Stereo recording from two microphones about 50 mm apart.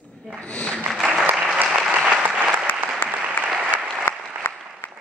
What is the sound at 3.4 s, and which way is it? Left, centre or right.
Applause, left.